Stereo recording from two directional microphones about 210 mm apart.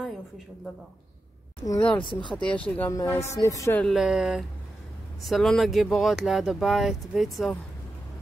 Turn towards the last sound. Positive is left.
turn(degrees=0)  # may be behind; listen again after turning